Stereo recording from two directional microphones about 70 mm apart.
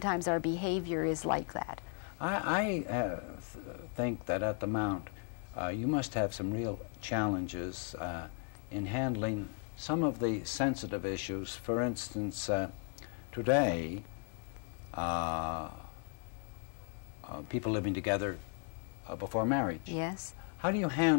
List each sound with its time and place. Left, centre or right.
0.0 s speech: left
15.0 s speech: left
17.3 s speech: left